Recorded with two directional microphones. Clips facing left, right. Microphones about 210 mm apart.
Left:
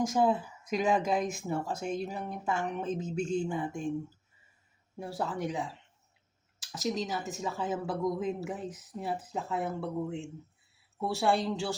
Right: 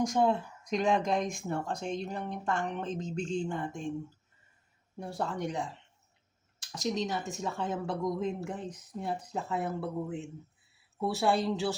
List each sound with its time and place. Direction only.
0.0 s speech: centre (ahead or behind)
4.9 s speech: 5° left (ahead or behind)